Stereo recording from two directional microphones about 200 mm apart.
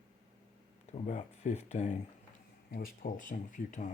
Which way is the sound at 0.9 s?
35° left (ahead or behind).